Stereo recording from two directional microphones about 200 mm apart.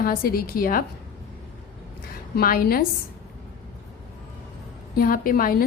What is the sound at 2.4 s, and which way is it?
Speech, 50° left (ahead or behind).